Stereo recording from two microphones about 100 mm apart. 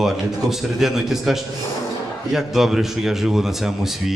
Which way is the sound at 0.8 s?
5° right (ahead or behind).